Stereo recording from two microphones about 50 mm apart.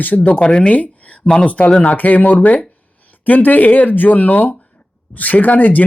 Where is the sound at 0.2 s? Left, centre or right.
Left.